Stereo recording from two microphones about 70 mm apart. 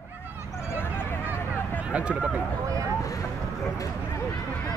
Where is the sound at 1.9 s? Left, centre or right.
Centre.